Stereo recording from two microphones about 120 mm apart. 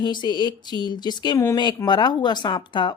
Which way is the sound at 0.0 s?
40° left (ahead or behind).